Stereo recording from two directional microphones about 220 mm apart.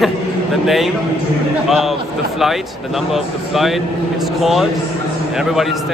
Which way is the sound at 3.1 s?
Centre (ahead or behind).